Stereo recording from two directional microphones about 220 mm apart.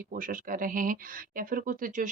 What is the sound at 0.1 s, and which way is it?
A woman's voice, 40° right (ahead or behind).